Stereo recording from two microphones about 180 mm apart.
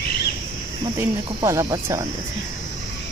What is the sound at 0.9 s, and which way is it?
Speech, 20° right (ahead or behind).